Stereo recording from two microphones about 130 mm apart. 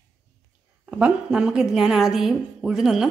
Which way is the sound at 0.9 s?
5° right (ahead or behind).